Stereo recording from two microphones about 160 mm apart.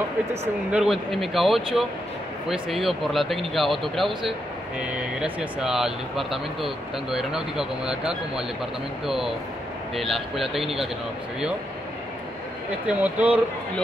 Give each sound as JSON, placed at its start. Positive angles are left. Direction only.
{"t": 0.7, "sound": "speech", "side_deg": -5}
{"t": 12.8, "sound": "speech", "side_deg": -10}